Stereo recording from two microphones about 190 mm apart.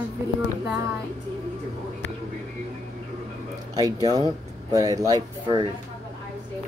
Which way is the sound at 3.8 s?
20° right (ahead or behind).